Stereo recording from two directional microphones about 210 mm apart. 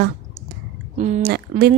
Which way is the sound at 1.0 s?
30° right (ahead or behind).